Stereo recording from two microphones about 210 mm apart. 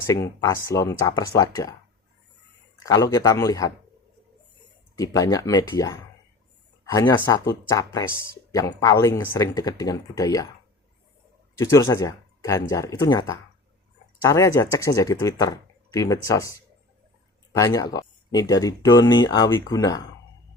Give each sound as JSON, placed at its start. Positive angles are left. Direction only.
{"t": 0.1, "sound": "speech", "side_deg": 15}
{"t": 2.7, "sound": "speech", "side_deg": 15}
{"t": 4.9, "sound": "speech", "side_deg": 15}
{"t": 11.6, "sound": "speech", "side_deg": 15}
{"t": 17.5, "sound": "speech", "side_deg": 15}